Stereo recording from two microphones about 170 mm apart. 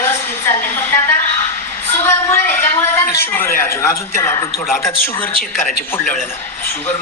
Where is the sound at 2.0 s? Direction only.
15° left (ahead or behind).